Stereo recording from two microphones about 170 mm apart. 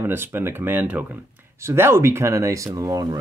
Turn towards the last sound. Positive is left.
turn(degrees=-20)  # may be behind; listen again after turning